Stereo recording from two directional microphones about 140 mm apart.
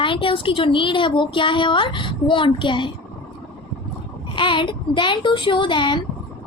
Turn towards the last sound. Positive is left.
turn(degrees=35)  # may be behind; listen again after turning